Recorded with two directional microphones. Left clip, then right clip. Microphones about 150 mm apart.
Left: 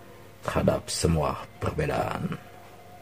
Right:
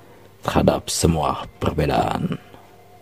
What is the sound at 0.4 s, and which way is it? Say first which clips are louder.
Speech: right 7 dB; 45° right (ahead or behind).